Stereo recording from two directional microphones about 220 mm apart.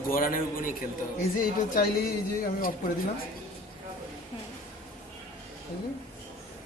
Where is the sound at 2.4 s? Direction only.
40° left (ahead or behind).